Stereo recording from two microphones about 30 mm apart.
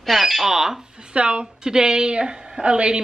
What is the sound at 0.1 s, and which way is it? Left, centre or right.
Speech, centre.